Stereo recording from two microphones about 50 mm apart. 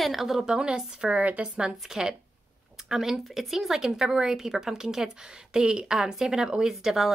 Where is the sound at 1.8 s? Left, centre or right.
Centre.